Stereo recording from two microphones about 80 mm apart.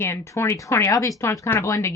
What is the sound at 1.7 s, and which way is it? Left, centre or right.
Speech, left.